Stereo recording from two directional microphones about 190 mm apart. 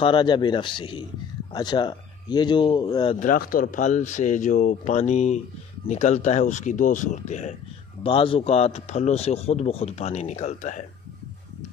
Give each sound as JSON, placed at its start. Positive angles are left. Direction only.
{"t": 0.0, "sound": "speech", "side_deg": 25}
{"t": 3.2, "sound": "speech", "side_deg": 45}
{"t": 8.0, "sound": "speech", "side_deg": 30}